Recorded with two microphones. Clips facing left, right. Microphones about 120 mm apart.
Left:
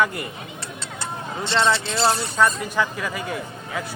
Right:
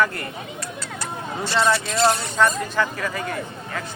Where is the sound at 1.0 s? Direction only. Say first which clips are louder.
Even; 25° left (ahead or behind).